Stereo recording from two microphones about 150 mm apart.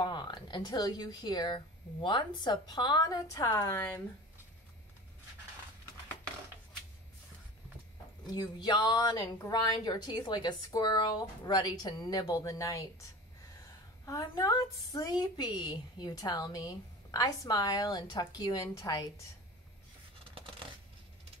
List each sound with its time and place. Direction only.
0.0 s a woman's voice: 30° left (ahead or behind)
8.3 s a woman's voice: 30° left (ahead or behind)
14.0 s a woman's voice: 25° left (ahead or behind)